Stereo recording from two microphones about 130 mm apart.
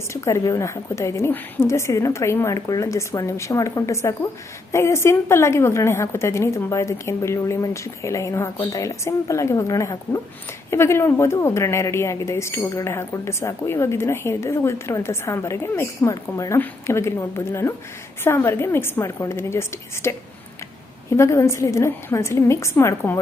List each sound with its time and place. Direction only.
0.1 s a woman's voice: 20° left (ahead or behind)
21.2 s a woman's voice: 20° left (ahead or behind)